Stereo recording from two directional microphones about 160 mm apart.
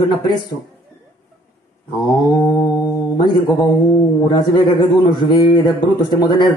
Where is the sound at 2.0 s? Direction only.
25° left (ahead or behind).